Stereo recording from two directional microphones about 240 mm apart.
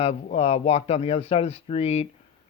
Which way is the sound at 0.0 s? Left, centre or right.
Left.